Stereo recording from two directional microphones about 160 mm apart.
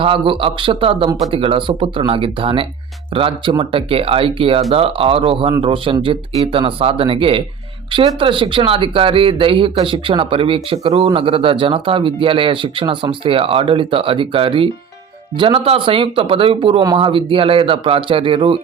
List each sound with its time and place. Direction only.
0.0 s speech: 35° right (ahead or behind)